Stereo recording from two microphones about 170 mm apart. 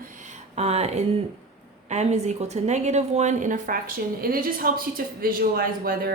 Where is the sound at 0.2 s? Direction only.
40° right (ahead or behind).